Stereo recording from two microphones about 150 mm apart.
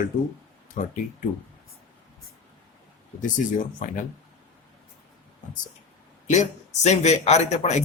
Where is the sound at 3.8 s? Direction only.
60° left (ahead or behind).